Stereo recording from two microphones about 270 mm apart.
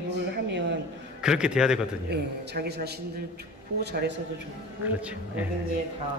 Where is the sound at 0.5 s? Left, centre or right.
Right.